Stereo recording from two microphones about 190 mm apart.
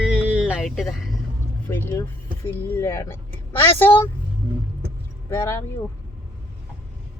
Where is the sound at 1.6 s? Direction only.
15° left (ahead or behind).